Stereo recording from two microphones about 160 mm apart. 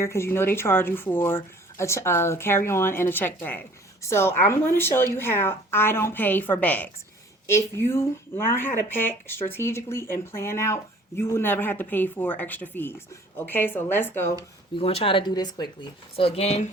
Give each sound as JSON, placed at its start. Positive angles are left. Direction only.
{"t": 0.0, "sound": "speech", "side_deg": 15}
{"t": 14.8, "sound": "speech", "side_deg": 35}